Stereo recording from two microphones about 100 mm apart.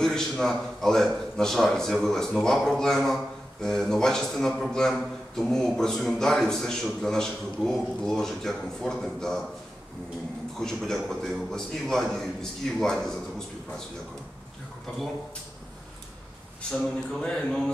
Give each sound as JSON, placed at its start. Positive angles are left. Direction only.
{"t": 0.0, "sound": "a man's voice", "side_deg": 5}
{"t": 10.6, "sound": "a man's voice", "side_deg": 5}
{"t": 17.2, "sound": "a sound", "side_deg": 5}